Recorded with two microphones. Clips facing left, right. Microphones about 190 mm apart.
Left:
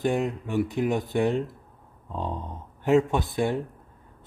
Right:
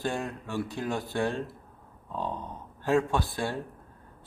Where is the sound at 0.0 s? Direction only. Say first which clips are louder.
Left 7 dB; 20° left (ahead or behind).